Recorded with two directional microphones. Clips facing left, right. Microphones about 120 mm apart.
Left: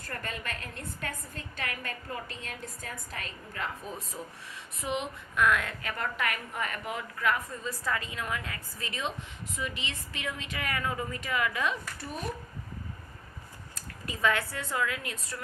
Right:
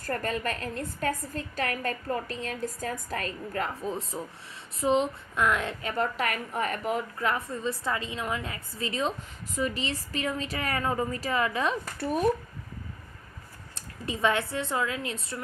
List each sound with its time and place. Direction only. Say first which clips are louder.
0.0 s a woman's voice: right 8 dB; 40° right (ahead or behind)
3.8 s a woman's voice: right 7 dB; 25° right (ahead or behind)
13.7 s a woman's voice: right 6 dB; 25° right (ahead or behind)